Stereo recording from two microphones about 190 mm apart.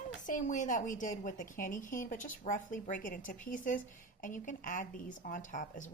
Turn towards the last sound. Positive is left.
turn(degrees=40)  # may be behind; listen again after turning